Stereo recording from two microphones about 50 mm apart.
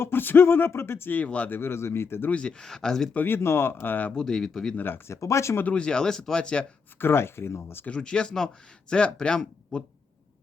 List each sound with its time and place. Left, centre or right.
0.0 s speech: left
1.1 s speech: left
1.5 s speech: left
2.3 s speech: centre
3.2 s speech: left
4.1 s speech: centre
5.0 s speech: left
5.7 s speech: centre
7.0 s speech: left
7.9 s speech: centre